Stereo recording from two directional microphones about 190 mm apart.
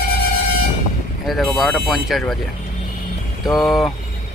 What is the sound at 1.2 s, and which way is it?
Speech, centre (ahead or behind).